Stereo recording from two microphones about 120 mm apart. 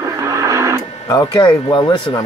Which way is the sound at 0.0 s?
25° right (ahead or behind).